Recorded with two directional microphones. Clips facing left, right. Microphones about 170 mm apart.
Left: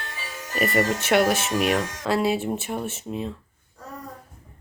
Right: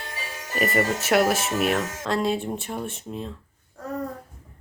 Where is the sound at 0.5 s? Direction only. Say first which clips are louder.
Left 1 dB; centre (ahead or behind).